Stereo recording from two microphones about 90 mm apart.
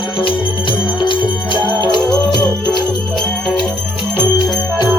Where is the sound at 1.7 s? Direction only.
55° left (ahead or behind).